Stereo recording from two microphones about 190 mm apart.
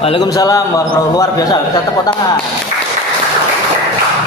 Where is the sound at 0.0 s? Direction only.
25° left (ahead or behind).